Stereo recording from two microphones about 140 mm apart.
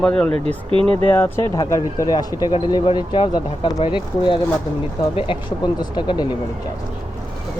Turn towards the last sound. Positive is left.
turn(degrees=35)  # may be behind; listen again after turning